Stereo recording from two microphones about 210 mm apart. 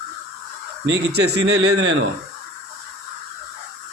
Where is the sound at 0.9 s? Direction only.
50° right (ahead or behind).